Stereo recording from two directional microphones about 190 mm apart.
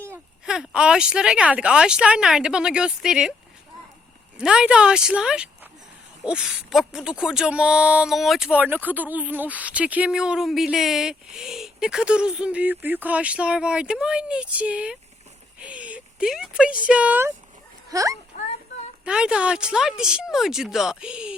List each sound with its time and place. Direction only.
0.0 s speech: 10° right (ahead or behind)
4.4 s speech: 5° right (ahead or behind)
18.3 s a sound: 35° left (ahead or behind)
19.0 s speech: 5° right (ahead or behind)